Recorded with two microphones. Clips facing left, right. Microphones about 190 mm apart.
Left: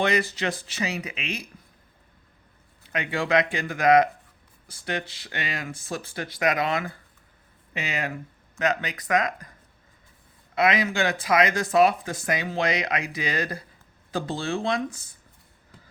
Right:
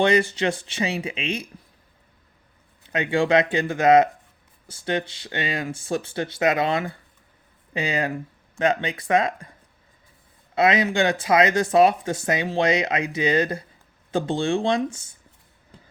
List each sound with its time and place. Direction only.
0.0 s speech: 30° right (ahead or behind)
2.8 s speech: 30° right (ahead or behind)
10.5 s speech: 25° right (ahead or behind)